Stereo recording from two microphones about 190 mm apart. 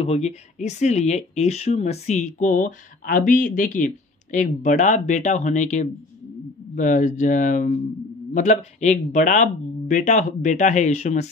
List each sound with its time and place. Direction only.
0.0 s speech: 35° left (ahead or behind)